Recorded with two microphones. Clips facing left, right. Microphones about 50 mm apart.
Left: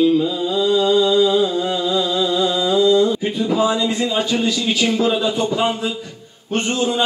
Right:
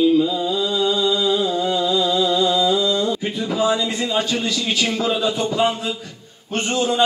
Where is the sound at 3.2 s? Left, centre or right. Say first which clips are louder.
Left 3 dB; centre.